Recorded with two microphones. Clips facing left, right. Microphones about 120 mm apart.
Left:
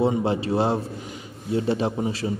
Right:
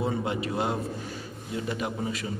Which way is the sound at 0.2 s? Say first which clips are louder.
Left 6 dB; 30° left (ahead or behind).